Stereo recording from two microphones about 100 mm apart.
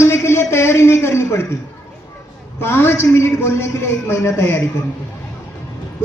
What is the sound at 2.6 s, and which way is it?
A man's voice, 25° left (ahead or behind).